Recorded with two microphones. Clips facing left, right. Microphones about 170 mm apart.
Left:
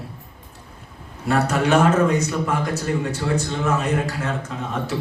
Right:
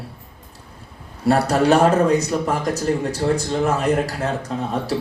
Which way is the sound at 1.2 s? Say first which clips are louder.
Right 4 dB; 35° right (ahead or behind).